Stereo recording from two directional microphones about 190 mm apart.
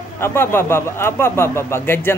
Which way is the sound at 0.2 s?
10° left (ahead or behind).